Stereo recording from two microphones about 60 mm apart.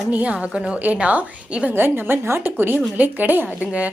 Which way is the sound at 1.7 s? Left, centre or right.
Right.